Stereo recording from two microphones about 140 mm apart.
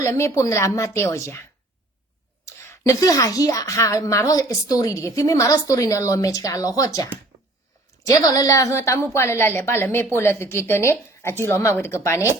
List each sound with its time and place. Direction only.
0.0 s a woman's voice: 20° left (ahead or behind)